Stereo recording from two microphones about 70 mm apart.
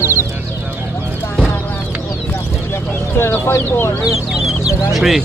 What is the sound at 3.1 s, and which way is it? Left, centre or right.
Speech, left.